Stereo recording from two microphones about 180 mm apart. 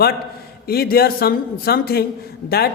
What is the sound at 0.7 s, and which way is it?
A man's voice, 60° left (ahead or behind).